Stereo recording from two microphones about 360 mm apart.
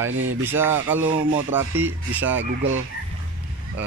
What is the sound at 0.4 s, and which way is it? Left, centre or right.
Speech, centre.